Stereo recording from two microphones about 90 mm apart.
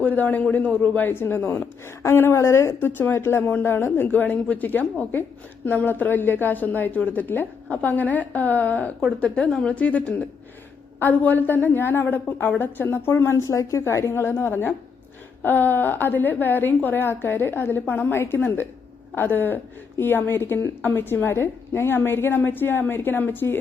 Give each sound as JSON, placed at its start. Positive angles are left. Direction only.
{"t": 0.0, "sound": "a man's voice", "side_deg": 20}